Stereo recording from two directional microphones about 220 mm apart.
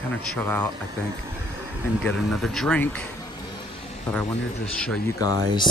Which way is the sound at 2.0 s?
Centre (ahead or behind).